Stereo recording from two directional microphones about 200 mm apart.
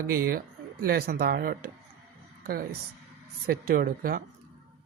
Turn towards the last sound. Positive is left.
turn(degrees=-45)  # may be behind; listen again after turning